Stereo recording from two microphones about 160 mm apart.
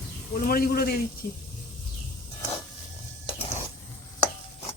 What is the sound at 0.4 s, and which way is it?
Speech, 65° left (ahead or behind).